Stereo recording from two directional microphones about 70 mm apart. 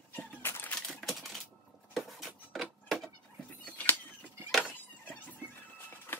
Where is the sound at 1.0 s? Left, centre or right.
Centre.